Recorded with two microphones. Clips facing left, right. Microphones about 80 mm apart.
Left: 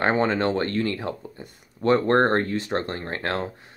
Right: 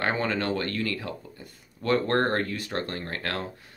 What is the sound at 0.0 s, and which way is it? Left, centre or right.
Speech, left.